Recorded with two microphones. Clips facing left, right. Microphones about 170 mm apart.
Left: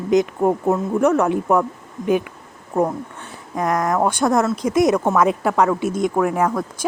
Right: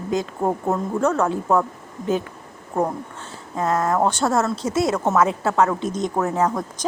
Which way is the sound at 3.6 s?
15° left (ahead or behind).